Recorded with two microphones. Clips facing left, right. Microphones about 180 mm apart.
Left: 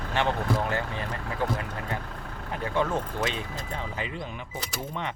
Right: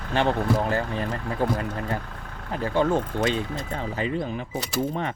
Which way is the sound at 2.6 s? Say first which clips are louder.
Right 5 dB; 30° right (ahead or behind).